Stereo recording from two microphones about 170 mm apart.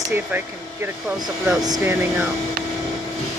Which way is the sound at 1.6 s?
20° right (ahead or behind).